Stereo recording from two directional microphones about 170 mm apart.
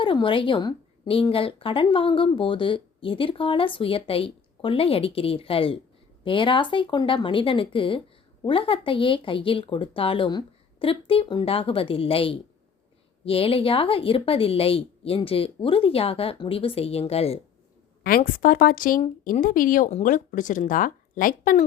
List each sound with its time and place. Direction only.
0.0 s speech: 30° left (ahead or behind)
18.3 s speech: 55° left (ahead or behind)